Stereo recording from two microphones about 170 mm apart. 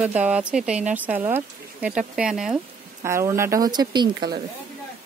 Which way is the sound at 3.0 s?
15° right (ahead or behind).